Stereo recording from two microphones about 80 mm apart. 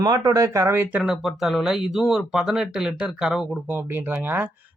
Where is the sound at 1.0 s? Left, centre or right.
Centre.